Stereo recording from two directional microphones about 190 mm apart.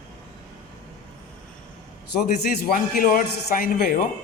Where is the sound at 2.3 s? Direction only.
50° left (ahead or behind).